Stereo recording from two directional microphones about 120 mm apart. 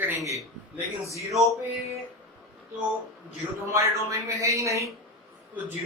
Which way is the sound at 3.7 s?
25° right (ahead or behind).